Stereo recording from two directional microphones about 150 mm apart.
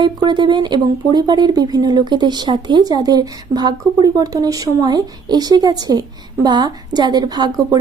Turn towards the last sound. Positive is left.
turn(degrees=-25)  # may be behind; listen again after turning